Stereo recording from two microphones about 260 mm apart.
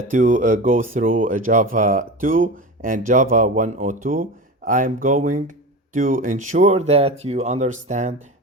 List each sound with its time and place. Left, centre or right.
0.1 s speech: right